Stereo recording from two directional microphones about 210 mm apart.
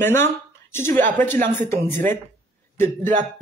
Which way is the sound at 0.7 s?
10° left (ahead or behind).